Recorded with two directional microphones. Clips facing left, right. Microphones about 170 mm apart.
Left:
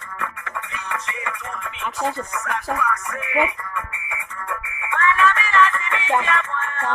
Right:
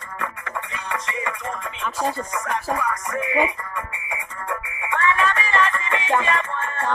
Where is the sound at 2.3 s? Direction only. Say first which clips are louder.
Right 1 dB; 30° right (ahead or behind).